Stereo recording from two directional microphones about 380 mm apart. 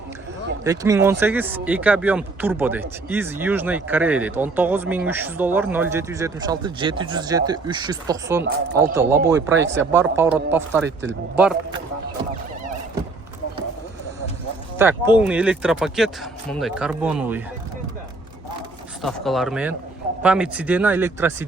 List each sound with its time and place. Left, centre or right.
0.6 s speech: centre
9.6 s speech: right
9.9 s speech: centre
14.8 s speech: centre
19.0 s speech: centre